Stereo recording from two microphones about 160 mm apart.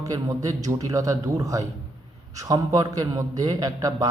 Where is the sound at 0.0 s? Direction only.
20° right (ahead or behind).